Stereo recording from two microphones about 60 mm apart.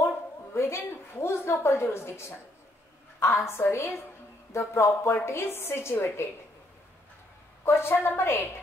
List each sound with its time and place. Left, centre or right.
0.6 s a woman's voice: left
7.6 s a woman's voice: left